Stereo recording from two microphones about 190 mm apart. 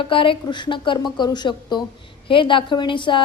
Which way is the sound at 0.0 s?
25° left (ahead or behind).